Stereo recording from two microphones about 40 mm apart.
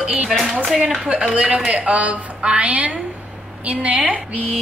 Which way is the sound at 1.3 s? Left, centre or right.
Right.